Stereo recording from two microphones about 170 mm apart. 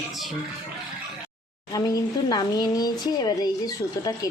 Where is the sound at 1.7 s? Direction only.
20° left (ahead or behind).